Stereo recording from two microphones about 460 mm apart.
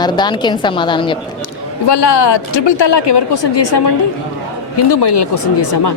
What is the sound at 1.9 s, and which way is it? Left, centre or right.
Speech, left.